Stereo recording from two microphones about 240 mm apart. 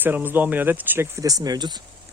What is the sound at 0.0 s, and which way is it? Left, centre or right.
Speech, centre.